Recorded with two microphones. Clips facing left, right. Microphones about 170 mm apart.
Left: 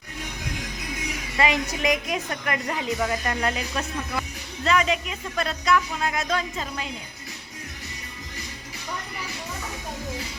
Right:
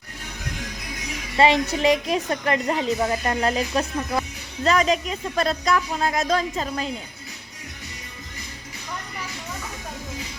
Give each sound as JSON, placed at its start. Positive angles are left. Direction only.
{"t": 1.4, "sound": "a woman's voice", "side_deg": -30}